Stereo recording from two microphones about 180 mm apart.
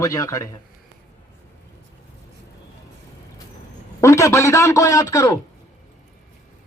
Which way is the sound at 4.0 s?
15° left (ahead or behind).